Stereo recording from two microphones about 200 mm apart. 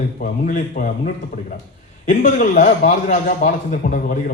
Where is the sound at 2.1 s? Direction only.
40° left (ahead or behind).